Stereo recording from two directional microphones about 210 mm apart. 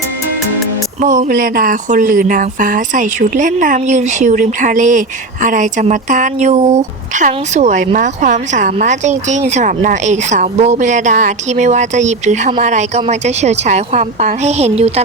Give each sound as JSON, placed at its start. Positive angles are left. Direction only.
{"t": 1.0, "sound": "speech", "side_deg": -35}